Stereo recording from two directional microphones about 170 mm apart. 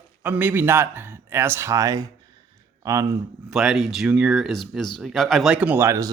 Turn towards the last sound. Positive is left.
turn(degrees=-15)  # may be behind; listen again after turning